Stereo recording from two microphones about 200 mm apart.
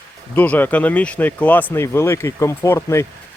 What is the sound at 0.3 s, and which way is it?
Speech, 10° left (ahead or behind).